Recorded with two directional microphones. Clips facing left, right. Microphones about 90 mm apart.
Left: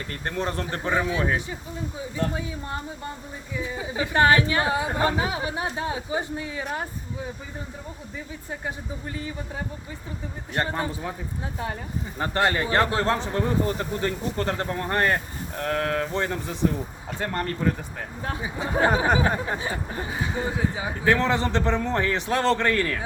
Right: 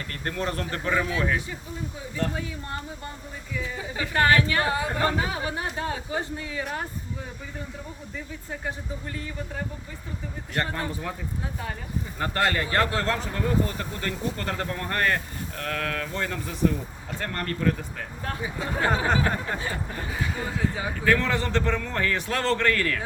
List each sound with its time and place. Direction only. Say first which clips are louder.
0.3 s speech: left 1 dB; 25° left (ahead or behind)
10.5 s speech: left 2 dB; 20° left (ahead or behind)
12.2 s speech: left 2 dB; 25° left (ahead or behind)